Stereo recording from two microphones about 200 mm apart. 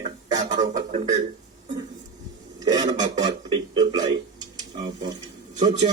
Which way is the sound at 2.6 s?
20° right (ahead or behind).